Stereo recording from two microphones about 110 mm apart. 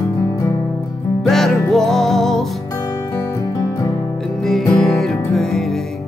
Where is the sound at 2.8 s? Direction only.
30° left (ahead or behind).